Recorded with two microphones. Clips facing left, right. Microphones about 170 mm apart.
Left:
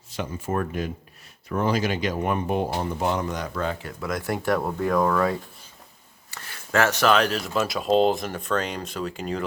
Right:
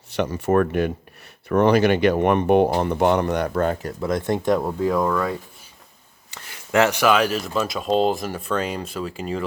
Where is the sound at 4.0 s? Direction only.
25° right (ahead or behind); by 5.3 s centre (ahead or behind).